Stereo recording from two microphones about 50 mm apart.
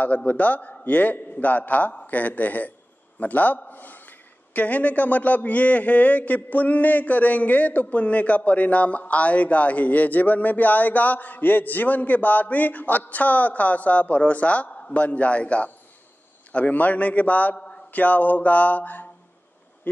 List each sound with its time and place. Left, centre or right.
0.0 s a man's voice: left
17.6 s mantra: centre
17.9 s a man's voice: left